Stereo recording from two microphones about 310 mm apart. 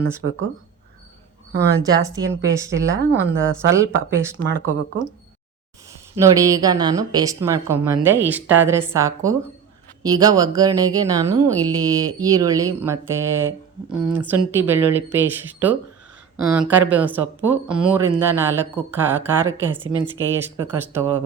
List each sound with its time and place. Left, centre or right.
0.2 s a woman's voice: right
1.5 s speech: centre
3.2 s a woman's voice: right
3.7 s speech: centre
4.9 s a woman's voice: right
6.1 s speech: centre